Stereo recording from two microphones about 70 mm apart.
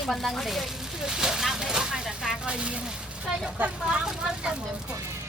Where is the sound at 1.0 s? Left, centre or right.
Centre; by 3.8 s right.